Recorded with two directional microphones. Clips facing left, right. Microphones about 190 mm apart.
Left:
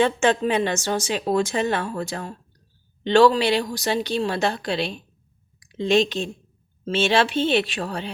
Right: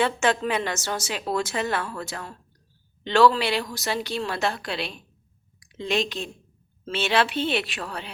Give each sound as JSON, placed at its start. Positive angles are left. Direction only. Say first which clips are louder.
{"t": 0.0, "sound": "a woman's voice", "louder": "left 4 dB", "side_deg": 25}